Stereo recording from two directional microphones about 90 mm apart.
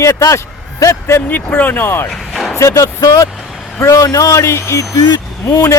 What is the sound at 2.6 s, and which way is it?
Speech, 35° left (ahead or behind).